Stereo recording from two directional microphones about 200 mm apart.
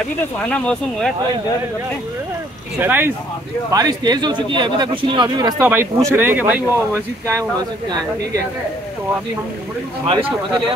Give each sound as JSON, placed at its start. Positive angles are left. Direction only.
{"t": 0.5, "sound": "speech", "side_deg": 5}
{"t": 2.8, "sound": "speech", "side_deg": -10}
{"t": 5.6, "sound": "speech", "side_deg": -10}